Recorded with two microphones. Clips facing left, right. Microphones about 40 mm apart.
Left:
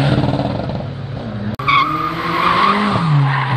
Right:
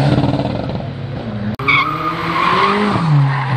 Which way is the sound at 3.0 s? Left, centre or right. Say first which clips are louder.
Even; left.